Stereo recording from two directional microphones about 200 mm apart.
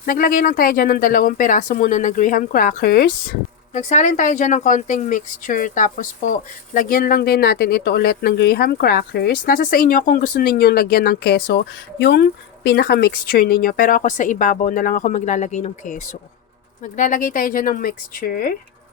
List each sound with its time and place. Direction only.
0.0 s speech: 45° left (ahead or behind)
3.8 s speech: 35° left (ahead or behind)